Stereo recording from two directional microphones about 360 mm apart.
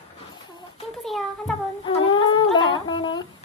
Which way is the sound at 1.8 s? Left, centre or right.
Centre.